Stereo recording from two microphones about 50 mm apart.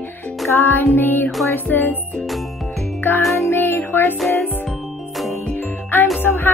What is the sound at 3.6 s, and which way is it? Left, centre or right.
Music, left.